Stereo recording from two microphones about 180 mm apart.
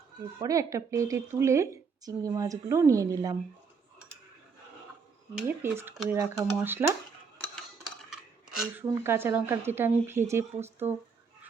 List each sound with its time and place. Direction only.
0.3 s a woman's voice: 20° right (ahead or behind)
5.6 s a woman's voice: 10° right (ahead or behind)
7.5 s speech: centre (ahead or behind)